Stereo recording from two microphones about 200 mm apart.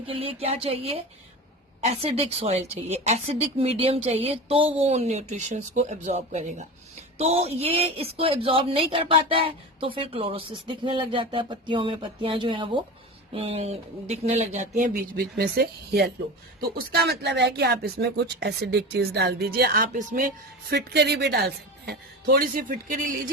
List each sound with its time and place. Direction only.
0.0 s speech: 30° right (ahead or behind)
15.1 s speech: 50° right (ahead or behind)